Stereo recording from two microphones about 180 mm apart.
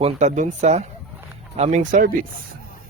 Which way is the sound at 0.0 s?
40° right (ahead or behind).